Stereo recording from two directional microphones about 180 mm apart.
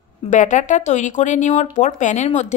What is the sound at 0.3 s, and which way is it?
Speech, 45° left (ahead or behind).